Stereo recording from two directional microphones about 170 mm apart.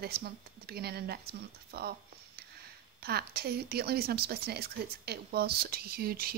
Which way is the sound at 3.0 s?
65° right (ahead or behind).